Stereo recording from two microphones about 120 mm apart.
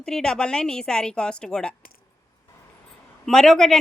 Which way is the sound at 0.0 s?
5° left (ahead or behind).